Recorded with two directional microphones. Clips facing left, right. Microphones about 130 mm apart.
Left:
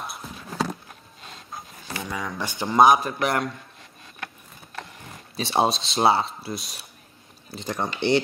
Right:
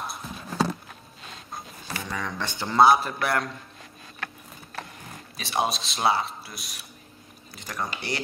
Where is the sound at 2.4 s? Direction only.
15° left (ahead or behind).